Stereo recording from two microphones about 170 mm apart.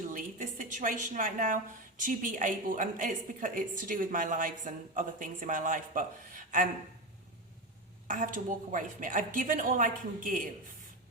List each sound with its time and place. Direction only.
0.1 s a woman's voice: 50° right (ahead or behind)
8.0 s a woman's voice: 50° right (ahead or behind)